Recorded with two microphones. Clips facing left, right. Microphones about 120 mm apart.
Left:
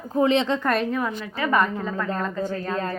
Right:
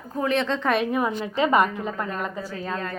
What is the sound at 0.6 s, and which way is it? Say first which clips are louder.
Speech: even; centre (ahead or behind).